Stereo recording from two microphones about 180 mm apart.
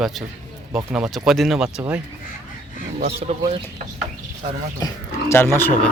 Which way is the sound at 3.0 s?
35° right (ahead or behind).